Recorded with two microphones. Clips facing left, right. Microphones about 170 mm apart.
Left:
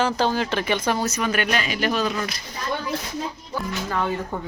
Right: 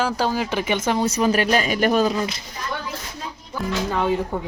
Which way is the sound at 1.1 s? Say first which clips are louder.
Right 5 dB; 35° right (ahead or behind).